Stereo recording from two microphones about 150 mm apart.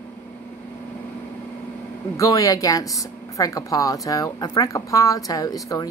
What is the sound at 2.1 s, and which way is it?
Speech, 20° left (ahead or behind).